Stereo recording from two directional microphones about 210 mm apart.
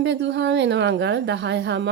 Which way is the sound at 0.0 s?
55° right (ahead or behind).